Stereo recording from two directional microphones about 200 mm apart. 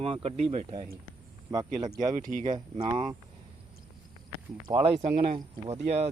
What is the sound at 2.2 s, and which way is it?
Speech, 40° right (ahead or behind).